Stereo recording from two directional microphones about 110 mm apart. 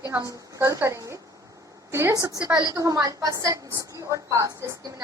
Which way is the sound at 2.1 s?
35° right (ahead or behind).